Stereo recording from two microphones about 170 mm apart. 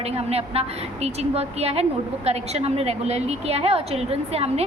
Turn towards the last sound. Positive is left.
turn(degrees=-35)  # may be behind; listen again after turning